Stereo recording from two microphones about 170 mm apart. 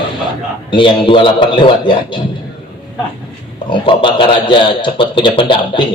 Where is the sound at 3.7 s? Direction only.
30° left (ahead or behind).